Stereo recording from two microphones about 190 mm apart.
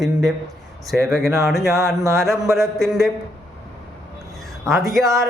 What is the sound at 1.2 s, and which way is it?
Speech, 15° right (ahead or behind).